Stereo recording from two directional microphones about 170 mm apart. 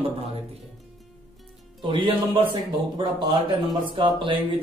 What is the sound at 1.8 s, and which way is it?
Speech, 30° right (ahead or behind).